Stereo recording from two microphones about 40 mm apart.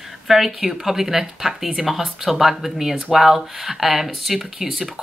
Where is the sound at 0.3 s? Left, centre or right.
Centre.